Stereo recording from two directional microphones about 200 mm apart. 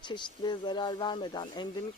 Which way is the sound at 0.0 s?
20° left (ahead or behind).